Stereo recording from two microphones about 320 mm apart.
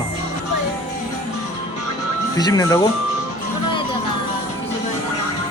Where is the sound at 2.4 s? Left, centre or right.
Centre.